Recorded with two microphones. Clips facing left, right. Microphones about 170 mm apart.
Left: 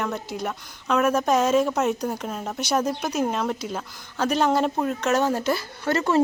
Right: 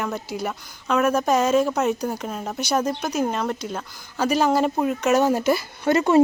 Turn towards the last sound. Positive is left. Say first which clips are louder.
# right 4 dB
turn(degrees=-15)  # may be behind; listen again after turning